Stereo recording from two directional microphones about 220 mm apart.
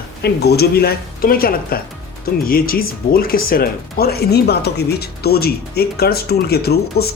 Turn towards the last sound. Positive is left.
turn(degrees=45)  # may be behind; listen again after turning